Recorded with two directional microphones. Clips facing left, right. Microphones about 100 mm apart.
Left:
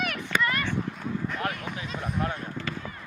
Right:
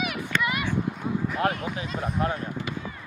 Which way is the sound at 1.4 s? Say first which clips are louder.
Right 5 dB; 30° right (ahead or behind).